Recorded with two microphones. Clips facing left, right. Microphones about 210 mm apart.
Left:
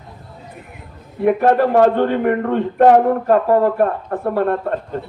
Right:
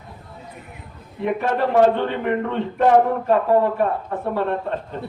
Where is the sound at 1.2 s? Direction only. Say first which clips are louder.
Left 7 dB; 50° left (ahead or behind).